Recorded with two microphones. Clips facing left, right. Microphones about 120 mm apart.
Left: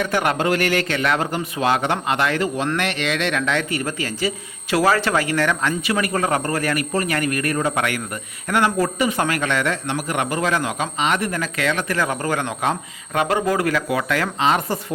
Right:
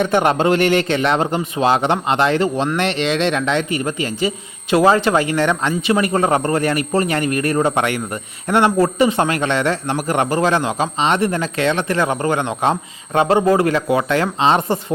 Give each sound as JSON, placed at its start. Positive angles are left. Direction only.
{"t": 0.0, "sound": "speech", "side_deg": -25}